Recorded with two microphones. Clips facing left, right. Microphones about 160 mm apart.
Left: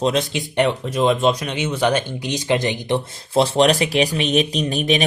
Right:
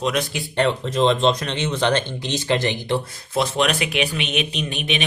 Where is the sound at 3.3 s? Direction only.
30° left (ahead or behind).